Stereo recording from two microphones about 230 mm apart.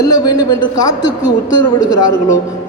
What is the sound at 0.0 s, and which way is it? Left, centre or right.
A man's voice, centre.